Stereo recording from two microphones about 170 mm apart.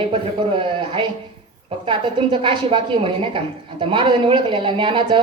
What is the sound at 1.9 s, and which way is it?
Speech, 30° right (ahead or behind).